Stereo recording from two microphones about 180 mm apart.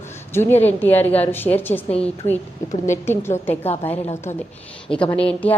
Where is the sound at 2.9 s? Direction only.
15° left (ahead or behind).